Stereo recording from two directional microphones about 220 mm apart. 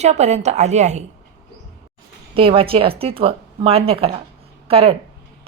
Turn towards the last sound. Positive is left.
turn(degrees=-25)  # may be behind; listen again after turning